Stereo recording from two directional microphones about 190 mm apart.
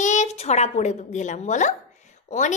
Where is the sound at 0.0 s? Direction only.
40° left (ahead or behind).